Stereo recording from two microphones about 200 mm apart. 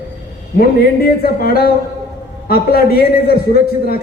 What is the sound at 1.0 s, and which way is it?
A man's voice, 50° left (ahead or behind).